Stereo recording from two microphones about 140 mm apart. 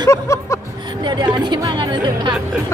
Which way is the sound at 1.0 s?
30° right (ahead or behind).